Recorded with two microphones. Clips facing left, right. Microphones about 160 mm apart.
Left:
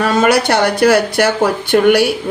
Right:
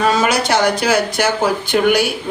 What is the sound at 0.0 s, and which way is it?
Speech, 60° left (ahead or behind).